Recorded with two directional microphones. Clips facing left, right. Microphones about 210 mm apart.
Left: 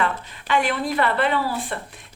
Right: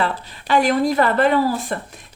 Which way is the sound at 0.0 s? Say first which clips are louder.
Right 2 dB; 35° right (ahead or behind).